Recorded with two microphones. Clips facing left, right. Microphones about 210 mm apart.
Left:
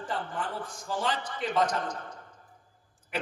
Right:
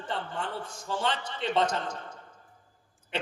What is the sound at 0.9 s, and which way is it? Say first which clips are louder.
A man's voice: even; 25° right (ahead or behind).